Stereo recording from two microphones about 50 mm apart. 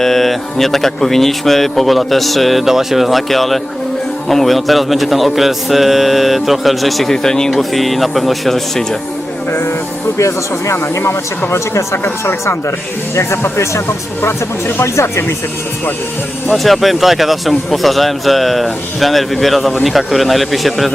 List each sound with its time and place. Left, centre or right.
0.0 s speech: centre
10.2 s speech: left
11.5 s speech: left
13.1 s speech: left
13.8 s speech: left
14.9 s speech: left
16.6 s speech: centre